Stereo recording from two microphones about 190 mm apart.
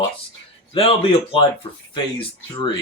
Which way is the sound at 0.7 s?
30° left (ahead or behind).